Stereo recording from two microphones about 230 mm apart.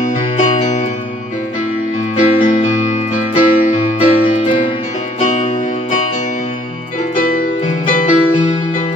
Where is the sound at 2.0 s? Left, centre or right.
Left.